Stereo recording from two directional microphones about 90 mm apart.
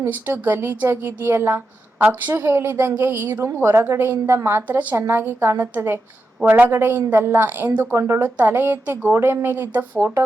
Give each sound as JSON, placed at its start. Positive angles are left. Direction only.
{"t": 0.0, "sound": "a woman's voice", "side_deg": -20}
{"t": 10.0, "sound": "speech", "side_deg": -35}